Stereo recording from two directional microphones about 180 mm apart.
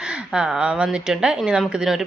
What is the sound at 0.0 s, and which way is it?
A woman's voice, 5° right (ahead or behind).